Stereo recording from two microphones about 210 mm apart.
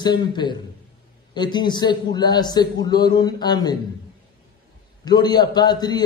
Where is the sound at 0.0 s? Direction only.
20° left (ahead or behind).